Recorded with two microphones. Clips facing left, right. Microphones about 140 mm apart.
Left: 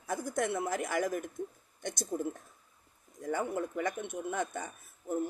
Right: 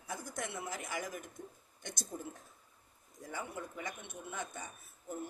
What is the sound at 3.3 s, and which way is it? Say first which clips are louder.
Speech: left 10 dB; 55° left (ahead or behind).